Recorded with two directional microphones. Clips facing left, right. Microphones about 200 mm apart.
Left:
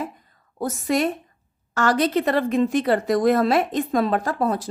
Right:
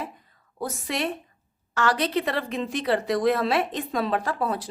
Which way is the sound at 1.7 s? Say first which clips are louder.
Left 4 dB; 45° left (ahead or behind).